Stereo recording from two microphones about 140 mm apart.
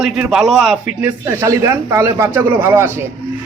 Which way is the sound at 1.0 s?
15° right (ahead or behind).